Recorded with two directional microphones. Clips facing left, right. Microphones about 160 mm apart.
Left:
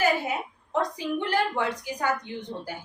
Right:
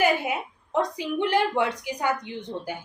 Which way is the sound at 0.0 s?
20° right (ahead or behind).